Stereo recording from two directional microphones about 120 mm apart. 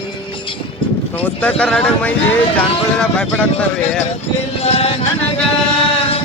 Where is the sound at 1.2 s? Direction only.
10° left (ahead or behind).